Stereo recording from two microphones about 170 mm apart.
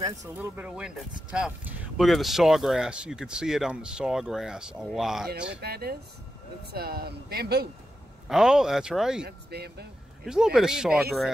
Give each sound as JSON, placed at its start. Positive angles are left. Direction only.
{"t": 0.3, "sound": "speech", "side_deg": -10}
{"t": 5.6, "sound": "speech", "side_deg": -65}
{"t": 8.3, "sound": "speech", "side_deg": -5}
{"t": 9.5, "sound": "speech", "side_deg": -70}
{"t": 10.2, "sound": "speech", "side_deg": -5}